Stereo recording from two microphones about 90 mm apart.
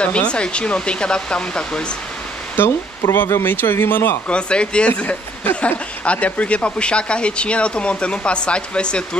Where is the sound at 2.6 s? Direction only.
25° left (ahead or behind).